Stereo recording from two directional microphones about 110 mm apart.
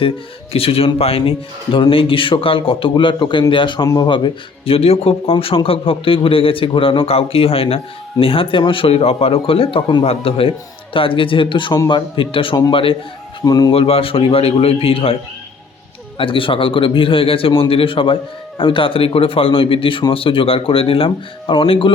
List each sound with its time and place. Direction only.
0.5 s speech: 60° left (ahead or behind)
13.4 s speech: 35° left (ahead or behind)
13.7 s speech: 60° left (ahead or behind)